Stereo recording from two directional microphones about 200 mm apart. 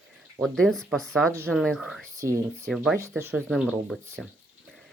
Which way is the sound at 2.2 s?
15° right (ahead or behind).